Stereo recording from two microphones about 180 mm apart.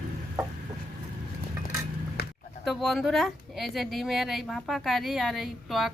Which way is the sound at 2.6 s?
Centre (ahead or behind).